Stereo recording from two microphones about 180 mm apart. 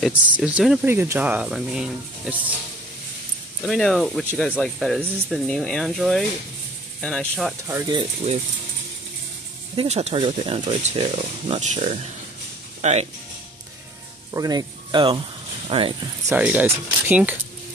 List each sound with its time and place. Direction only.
0.0 s speech: 5° right (ahead or behind)
3.6 s speech: centre (ahead or behind)
7.6 s speech: 20° right (ahead or behind)
9.8 s speech: 35° right (ahead or behind)
14.3 s speech: 20° right (ahead or behind)
16.3 s speech: 10° right (ahead or behind)